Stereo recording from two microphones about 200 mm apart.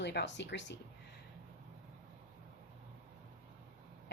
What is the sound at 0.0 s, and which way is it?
Speech, 60° left (ahead or behind).